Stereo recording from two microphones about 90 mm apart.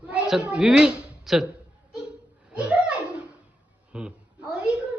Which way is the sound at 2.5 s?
15° right (ahead or behind).